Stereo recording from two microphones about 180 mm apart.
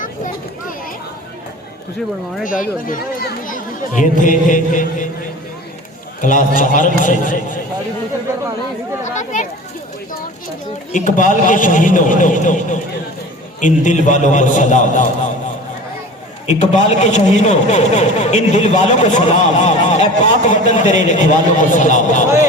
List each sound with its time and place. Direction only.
2.4 s speech: 50° left (ahead or behind)
6.2 s speech: 45° left (ahead or behind)
9.0 s speech: 45° left (ahead or behind)
10.9 s speech: 45° left (ahead or behind)
16.5 s a man's voice: 40° left (ahead or behind)